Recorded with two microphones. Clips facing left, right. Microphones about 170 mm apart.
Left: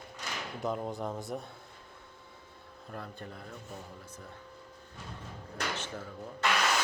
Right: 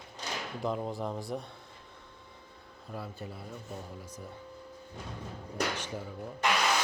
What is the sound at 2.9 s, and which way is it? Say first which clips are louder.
Speech: right 2 dB; 5° right (ahead or behind).